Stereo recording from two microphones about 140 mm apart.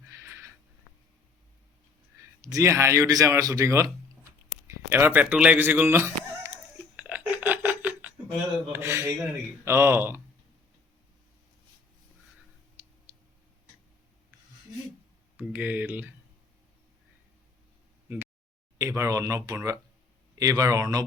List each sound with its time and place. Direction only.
0.1 s sniff: 20° right (ahead or behind)
2.4 s speech: 20° right (ahead or behind)
4.7 s a sound: 15° right (ahead or behind)
8.7 s speech: 20° right (ahead or behind)
13.1 s tick-tock: 20° right (ahead or behind)
15.4 s speech: 15° right (ahead or behind)
18.8 s speech: 20° right (ahead or behind)